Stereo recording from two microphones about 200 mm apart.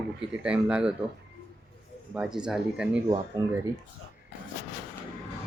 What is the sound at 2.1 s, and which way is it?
Speech, 5° right (ahead or behind).